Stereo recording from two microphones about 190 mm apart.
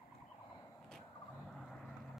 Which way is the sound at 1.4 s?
Centre (ahead or behind).